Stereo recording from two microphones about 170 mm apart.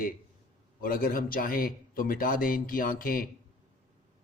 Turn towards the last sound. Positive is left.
turn(degrees=55)  # may be behind; listen again after turning